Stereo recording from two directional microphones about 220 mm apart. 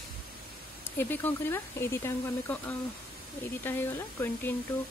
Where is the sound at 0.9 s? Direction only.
10° left (ahead or behind).